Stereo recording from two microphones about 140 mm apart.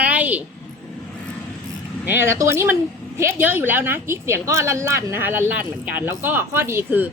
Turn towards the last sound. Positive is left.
turn(degrees=-15)  # may be behind; listen again after turning